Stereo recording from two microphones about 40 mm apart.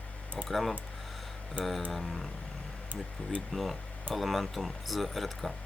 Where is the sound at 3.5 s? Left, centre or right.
Centre.